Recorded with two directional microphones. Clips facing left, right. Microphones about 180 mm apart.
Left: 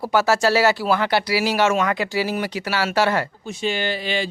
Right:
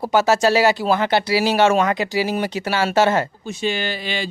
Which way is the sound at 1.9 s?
20° right (ahead or behind).